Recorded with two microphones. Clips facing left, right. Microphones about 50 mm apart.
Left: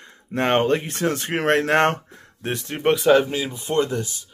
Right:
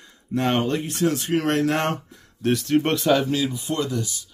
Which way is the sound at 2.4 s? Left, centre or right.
Left.